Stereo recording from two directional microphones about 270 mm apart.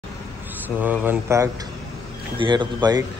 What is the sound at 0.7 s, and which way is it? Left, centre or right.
Speech, centre.